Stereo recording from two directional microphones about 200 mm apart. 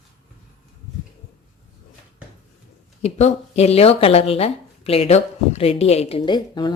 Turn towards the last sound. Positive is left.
turn(degrees=25)  # may be behind; listen again after turning